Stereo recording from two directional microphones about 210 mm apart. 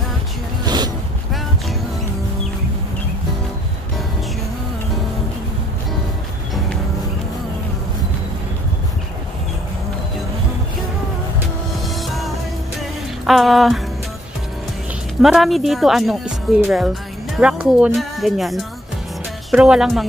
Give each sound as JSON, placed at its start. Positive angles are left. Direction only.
{"t": 0.7, "sound": "a sound", "side_deg": -20}
{"t": 13.3, "sound": "speech", "side_deg": 0}
{"t": 15.2, "sound": "speech", "side_deg": 0}